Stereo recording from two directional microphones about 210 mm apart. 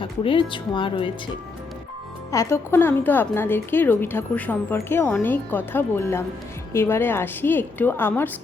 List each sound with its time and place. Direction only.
0.0 s speech: 25° left (ahead or behind)
2.3 s a woman's voice: 15° left (ahead or behind)